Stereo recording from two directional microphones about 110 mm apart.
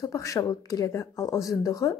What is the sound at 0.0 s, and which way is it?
Speech, 30° left (ahead or behind).